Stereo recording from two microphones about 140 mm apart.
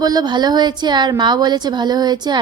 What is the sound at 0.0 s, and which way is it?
A woman's voice, 30° right (ahead or behind).